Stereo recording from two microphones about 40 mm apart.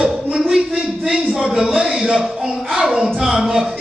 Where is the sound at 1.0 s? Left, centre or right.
Centre.